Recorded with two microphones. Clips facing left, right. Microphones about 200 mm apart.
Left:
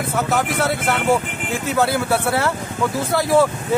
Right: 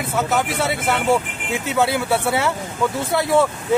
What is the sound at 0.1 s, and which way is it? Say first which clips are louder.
Speech: right 1 dB; centre (ahead or behind).